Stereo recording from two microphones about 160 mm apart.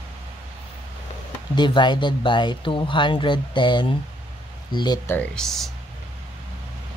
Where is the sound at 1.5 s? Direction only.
30° left (ahead or behind).